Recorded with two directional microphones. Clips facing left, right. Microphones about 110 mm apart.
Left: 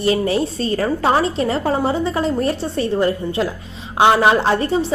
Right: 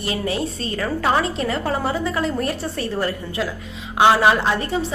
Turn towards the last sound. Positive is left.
turn(degrees=35)  # may be behind; listen again after turning